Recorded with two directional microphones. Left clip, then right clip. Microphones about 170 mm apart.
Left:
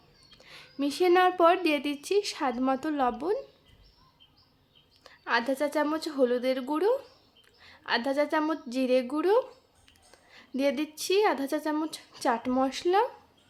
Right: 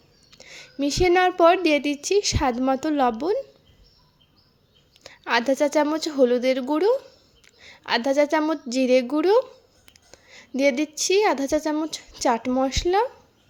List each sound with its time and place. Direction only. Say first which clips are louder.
0.3 s speech: right 6 dB; 25° right (ahead or behind)
5.0 s a woman's voice: right 6 dB; 35° right (ahead or behind)
10.1 s a sound: right 6 dB; 30° right (ahead or behind)
10.6 s speech: right 7 dB; 30° right (ahead or behind)